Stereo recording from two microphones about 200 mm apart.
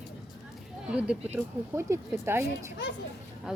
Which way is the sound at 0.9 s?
5° right (ahead or behind).